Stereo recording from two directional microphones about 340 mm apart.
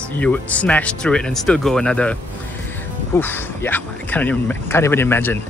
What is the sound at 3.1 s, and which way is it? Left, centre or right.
Speech, centre.